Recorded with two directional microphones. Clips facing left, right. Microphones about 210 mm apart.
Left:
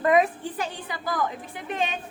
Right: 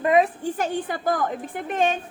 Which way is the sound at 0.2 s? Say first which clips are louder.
Right 3 dB; 45° right (ahead or behind).